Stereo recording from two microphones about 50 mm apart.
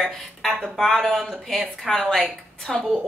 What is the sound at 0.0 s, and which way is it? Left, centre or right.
A woman's voice, centre.